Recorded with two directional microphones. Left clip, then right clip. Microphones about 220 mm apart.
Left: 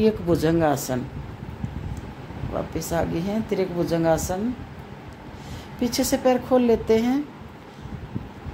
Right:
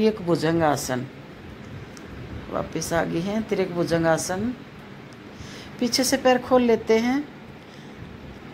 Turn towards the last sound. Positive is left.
turn(degrees=5)  # may be behind; listen again after turning